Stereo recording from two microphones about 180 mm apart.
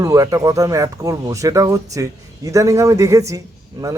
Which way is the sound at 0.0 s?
20° right (ahead or behind).